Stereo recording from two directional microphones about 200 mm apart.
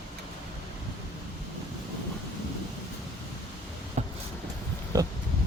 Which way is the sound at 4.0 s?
35° right (ahead or behind).